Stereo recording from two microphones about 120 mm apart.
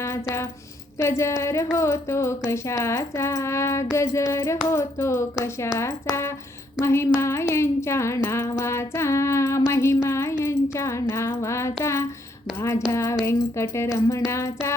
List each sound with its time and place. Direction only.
0.0 s speech: 25° left (ahead or behind)
0.9 s female singing: 25° left (ahead or behind)